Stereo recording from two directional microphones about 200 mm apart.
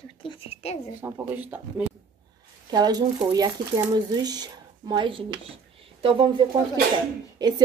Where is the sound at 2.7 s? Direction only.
20° right (ahead or behind).